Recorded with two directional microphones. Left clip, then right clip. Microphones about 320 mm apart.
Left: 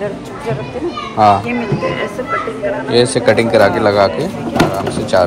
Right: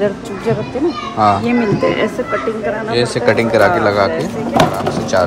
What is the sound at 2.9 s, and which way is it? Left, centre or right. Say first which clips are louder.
Speech: left 3 dB; centre.